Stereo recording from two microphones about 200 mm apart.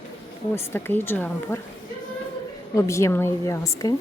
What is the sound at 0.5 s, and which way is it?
Speech, 10° left (ahead or behind).